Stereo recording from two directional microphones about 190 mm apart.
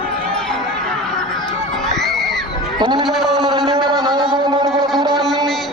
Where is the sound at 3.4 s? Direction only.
25° right (ahead or behind).